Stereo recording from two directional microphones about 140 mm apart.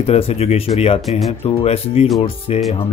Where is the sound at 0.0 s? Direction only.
45° left (ahead or behind).